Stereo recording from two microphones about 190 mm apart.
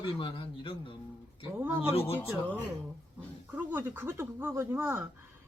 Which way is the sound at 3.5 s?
10° right (ahead or behind).